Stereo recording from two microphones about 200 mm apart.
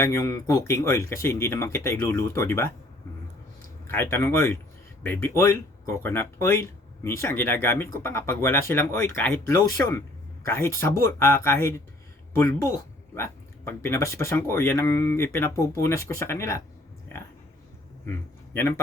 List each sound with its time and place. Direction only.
0.0 s speech: 15° left (ahead or behind)
3.9 s speech: 10° left (ahead or behind)
13.1 s speech: 10° left (ahead or behind)